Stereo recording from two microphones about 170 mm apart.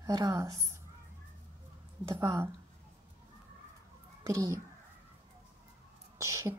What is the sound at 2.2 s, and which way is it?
Speech, 15° right (ahead or behind).